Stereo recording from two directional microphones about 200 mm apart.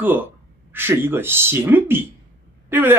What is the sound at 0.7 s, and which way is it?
Speech, 10° right (ahead or behind).